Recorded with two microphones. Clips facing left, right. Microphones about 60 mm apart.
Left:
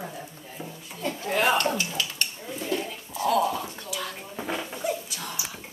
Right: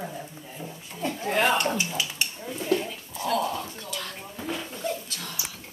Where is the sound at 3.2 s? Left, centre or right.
Centre.